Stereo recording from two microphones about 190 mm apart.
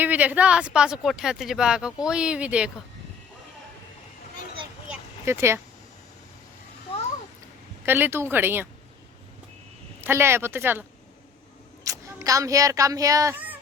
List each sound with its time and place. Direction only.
0.0 s speech: 10° right (ahead or behind)
4.9 s a sound: 15° right (ahead or behind)
7.9 s speech: 10° right (ahead or behind)
10.0 s a child's voice: 15° right (ahead or behind)